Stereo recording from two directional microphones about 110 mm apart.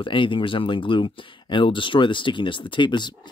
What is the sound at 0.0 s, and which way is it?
Speech, 50° left (ahead or behind).